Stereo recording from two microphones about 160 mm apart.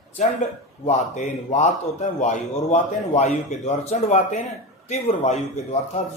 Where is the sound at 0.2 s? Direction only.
45° left (ahead or behind).